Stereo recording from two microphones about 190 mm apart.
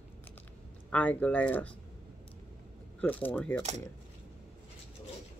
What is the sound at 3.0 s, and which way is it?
Speech, 10° left (ahead or behind).